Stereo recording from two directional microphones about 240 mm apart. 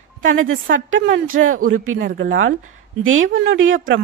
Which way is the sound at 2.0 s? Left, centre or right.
Right.